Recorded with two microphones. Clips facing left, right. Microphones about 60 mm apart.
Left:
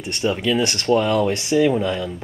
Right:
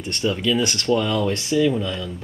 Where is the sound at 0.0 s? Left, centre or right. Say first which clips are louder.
Left 1 dB; centre.